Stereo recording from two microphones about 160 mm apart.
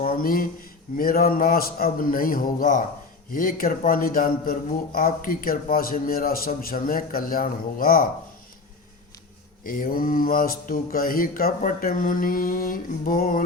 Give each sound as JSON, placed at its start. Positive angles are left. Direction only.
{"t": 0.0, "sound": "a sound", "side_deg": 60}
{"t": 0.9, "sound": "mantra", "side_deg": 65}
{"t": 9.6, "sound": "mantra", "side_deg": 60}